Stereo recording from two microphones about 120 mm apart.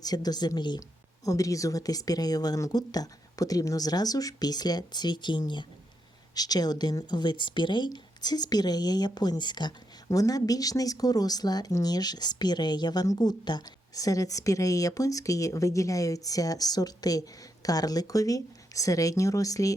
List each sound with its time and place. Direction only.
0.0 s speech: 35° left (ahead or behind)